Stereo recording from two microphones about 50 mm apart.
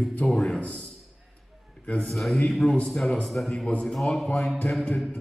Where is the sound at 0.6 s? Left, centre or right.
Left.